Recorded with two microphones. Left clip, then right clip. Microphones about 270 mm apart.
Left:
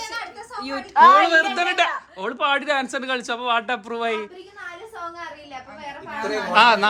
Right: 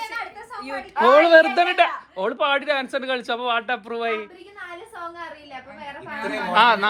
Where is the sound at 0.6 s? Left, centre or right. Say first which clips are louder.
Left 6 dB; left.